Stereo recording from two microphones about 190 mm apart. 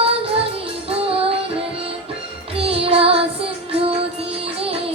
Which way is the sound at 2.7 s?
30° right (ahead or behind).